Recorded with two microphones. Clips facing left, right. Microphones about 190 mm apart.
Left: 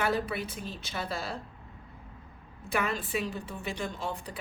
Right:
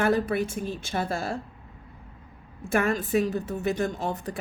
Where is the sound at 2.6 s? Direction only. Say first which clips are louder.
Right 6 dB; 45° right (ahead or behind).